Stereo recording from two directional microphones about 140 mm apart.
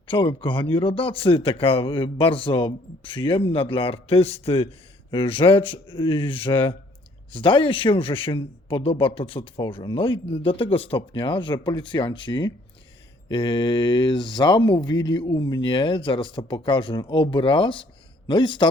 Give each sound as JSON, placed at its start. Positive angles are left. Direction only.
{"t": 0.1, "sound": "a man's voice", "side_deg": 35}